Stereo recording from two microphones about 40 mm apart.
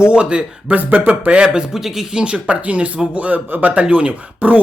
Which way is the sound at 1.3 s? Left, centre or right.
Right.